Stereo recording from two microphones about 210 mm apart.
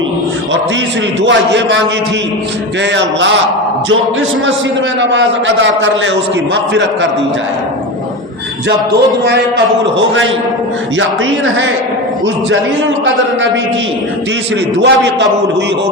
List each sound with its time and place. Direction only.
1.2 s a man's voice: 60° right (ahead or behind)
2.9 s a man's voice: 60° right (ahead or behind)
4.9 s a man's voice: 60° right (ahead or behind)
11.3 s speech: 65° right (ahead or behind)
14.8 s a man's voice: 55° right (ahead or behind)